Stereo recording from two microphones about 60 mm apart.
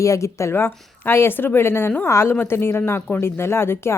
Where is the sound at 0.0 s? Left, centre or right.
Left.